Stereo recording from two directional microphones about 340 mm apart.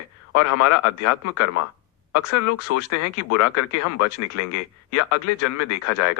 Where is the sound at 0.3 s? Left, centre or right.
Left.